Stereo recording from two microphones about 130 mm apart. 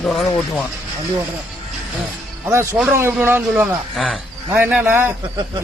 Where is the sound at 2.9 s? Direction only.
15° right (ahead or behind).